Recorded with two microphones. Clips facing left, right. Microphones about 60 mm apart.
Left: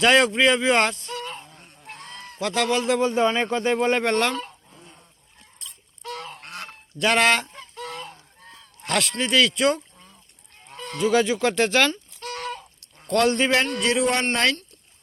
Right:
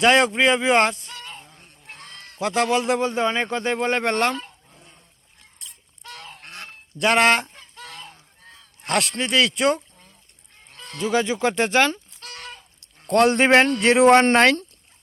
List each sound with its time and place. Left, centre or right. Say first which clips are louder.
0.0 s speech: right 1 dB; centre
1.1 s honk: left 6 dB; centre
2.4 s speech: right 2 dB; centre
4.2 s speech: right 1 dB; centre
7.0 s speech: right 2 dB; centre
7.8 s goose: left 5 dB; centre
8.9 s speech: right 1 dB; centre
10.9 s speech: left 2 dB; centre
12.3 s a sound: left 8 dB; left
13.1 s speech: right 4 dB; right